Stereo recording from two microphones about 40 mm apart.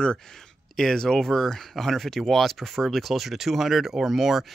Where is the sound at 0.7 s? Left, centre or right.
Centre.